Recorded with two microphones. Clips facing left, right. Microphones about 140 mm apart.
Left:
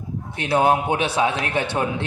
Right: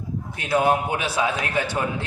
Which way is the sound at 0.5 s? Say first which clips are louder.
Left 2 dB; 25° left (ahead or behind).